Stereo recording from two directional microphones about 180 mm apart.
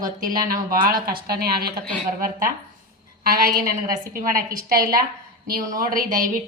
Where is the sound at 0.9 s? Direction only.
55° right (ahead or behind).